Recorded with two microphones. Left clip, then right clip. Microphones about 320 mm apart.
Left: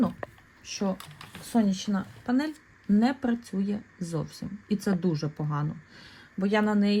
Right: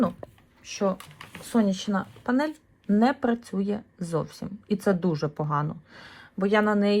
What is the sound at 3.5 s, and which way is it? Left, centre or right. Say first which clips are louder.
Speech: right 3 dB; right.